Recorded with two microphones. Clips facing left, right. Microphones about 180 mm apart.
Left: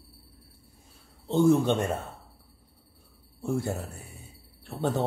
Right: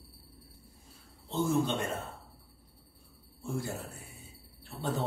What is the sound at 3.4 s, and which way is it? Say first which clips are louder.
Speech: left 7 dB; 65° left (ahead or behind).